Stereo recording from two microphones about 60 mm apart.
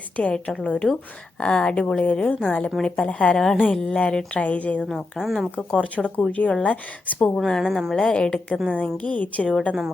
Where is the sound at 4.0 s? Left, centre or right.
Centre.